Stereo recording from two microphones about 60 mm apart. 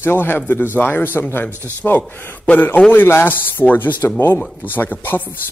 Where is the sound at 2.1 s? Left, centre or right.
Left.